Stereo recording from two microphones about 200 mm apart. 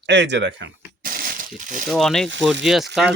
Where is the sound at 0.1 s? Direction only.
60° right (ahead or behind).